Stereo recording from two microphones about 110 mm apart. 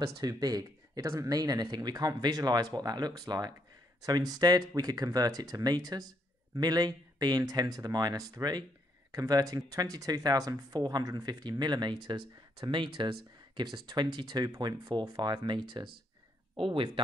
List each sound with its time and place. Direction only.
0.0 s speech: 35° right (ahead or behind); by 17.0 s 50° right (ahead or behind)